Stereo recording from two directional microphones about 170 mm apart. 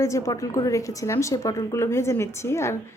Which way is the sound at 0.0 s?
15° left (ahead or behind).